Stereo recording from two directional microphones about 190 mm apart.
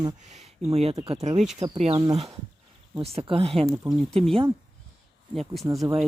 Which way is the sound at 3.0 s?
30° right (ahead or behind).